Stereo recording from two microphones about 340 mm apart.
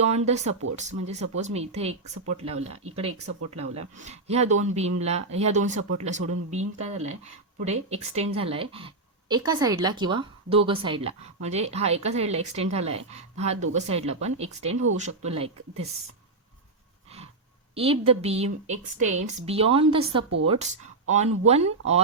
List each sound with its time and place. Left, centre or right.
0.0 s speech: centre
3.1 s speech: right
3.8 s speech: centre
14.7 s speech: right
14.9 s speech: centre
17.7 s speech: centre